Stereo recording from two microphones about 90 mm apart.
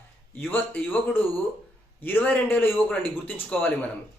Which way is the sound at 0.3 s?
20° left (ahead or behind).